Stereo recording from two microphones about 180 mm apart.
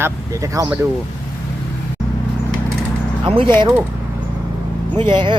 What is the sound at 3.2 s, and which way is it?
Speech, 25° right (ahead or behind).